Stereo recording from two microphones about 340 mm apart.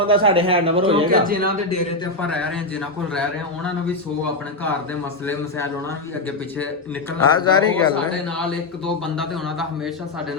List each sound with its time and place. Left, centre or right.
0.0 s a man's voice: centre
1.1 s a man's voice: right
2.2 s a man's voice: centre
7.3 s speech: centre
9.1 s a man's voice: centre